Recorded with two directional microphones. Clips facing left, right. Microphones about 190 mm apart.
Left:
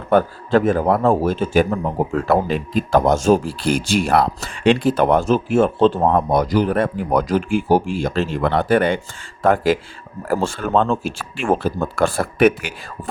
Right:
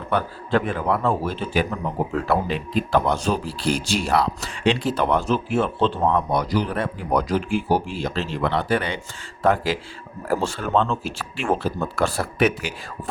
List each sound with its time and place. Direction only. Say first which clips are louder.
0.1 s speech: left 7 dB; 45° left (ahead or behind)